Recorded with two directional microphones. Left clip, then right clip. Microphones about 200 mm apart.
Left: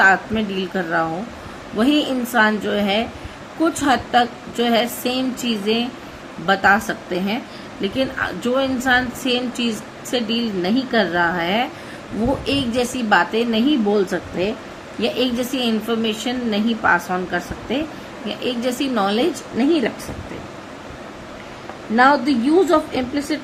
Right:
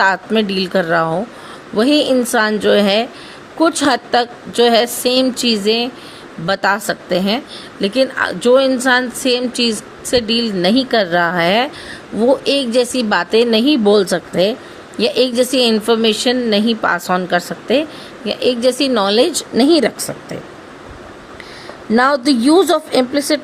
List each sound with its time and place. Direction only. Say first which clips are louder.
0.0 s a woman's voice: right 1 dB; 55° right (ahead or behind)
21.9 s a woman's voice: right 2 dB; 60° right (ahead or behind)